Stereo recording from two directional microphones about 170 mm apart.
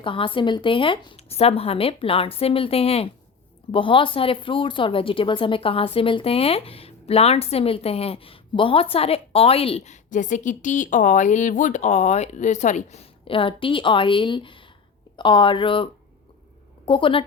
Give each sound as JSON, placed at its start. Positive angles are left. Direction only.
{"t": 0.0, "sound": "speech", "side_deg": 30}
{"t": 13.2, "sound": "a woman's voice", "side_deg": 30}